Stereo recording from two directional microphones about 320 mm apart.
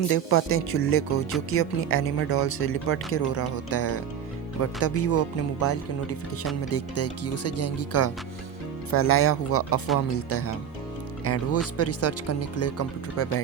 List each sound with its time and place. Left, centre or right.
0.1 s speech: left